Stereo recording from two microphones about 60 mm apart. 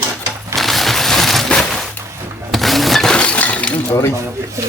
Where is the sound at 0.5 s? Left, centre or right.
Centre.